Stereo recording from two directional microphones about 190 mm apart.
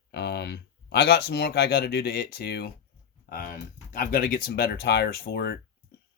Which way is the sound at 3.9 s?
50° left (ahead or behind).